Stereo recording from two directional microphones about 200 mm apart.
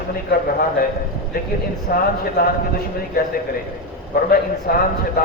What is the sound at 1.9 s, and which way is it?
Speech, 45° left (ahead or behind).